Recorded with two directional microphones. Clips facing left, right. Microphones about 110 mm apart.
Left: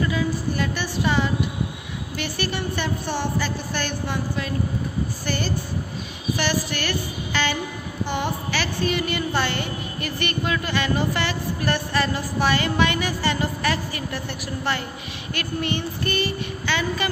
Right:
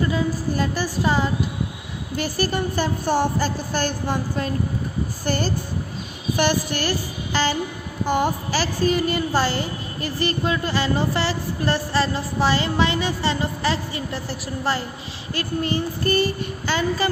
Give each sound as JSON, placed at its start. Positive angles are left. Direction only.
{"t": 0.1, "sound": "music", "side_deg": -35}
{"t": 2.1, "sound": "a woman's voice", "side_deg": -40}